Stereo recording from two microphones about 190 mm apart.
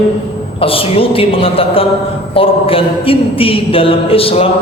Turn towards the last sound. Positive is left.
turn(degrees=30)  # may be behind; listen again after turning